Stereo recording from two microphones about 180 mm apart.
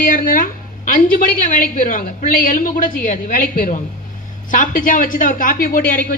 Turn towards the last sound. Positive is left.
turn(degrees=50)  # may be behind; listen again after turning